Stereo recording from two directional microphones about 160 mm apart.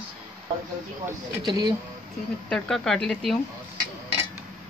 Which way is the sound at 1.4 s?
25° right (ahead or behind).